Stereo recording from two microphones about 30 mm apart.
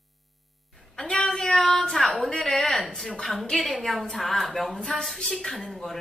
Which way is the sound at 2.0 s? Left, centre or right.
Centre.